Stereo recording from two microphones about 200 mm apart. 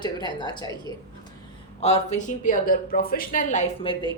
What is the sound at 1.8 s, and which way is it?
A woman's voice, 35° left (ahead or behind).